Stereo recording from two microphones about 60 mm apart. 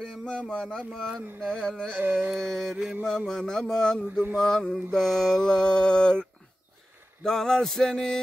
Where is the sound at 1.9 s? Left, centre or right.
Right.